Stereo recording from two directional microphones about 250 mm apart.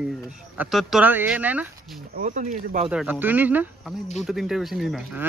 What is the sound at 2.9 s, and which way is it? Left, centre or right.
Speech, centre.